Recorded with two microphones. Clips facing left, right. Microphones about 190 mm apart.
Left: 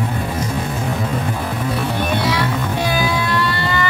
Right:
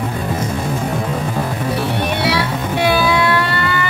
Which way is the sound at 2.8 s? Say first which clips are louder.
Right 7 dB; 70° right (ahead or behind).